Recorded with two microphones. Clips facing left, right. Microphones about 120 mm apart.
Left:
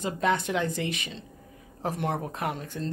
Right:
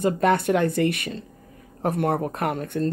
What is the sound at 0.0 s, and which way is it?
Speech, 55° right (ahead or behind).